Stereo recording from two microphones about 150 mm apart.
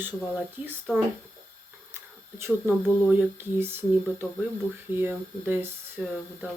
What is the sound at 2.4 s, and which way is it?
Speech, 15° right (ahead or behind).